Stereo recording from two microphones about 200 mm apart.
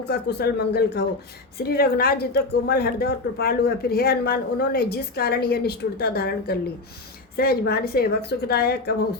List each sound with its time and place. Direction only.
0.1 s speech: 55° left (ahead or behind)